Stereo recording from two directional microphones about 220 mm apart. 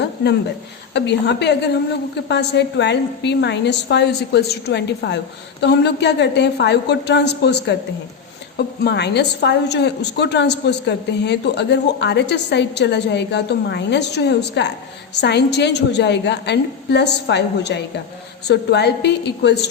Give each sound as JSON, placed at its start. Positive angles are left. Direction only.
{"t": 0.9, "sound": "a woman's voice", "side_deg": 50}